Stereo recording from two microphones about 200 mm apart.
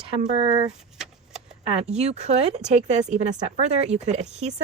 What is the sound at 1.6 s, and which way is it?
Speech, 30° right (ahead or behind).